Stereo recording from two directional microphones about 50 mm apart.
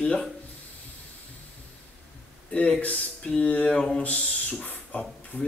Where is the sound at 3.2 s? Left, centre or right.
Left.